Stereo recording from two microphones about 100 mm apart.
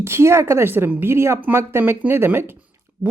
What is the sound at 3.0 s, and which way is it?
Speech, 45° right (ahead or behind).